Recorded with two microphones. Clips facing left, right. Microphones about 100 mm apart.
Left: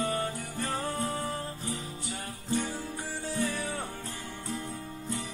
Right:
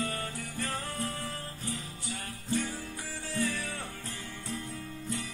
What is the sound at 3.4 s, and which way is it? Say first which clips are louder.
Music: even; 20° left (ahead or behind).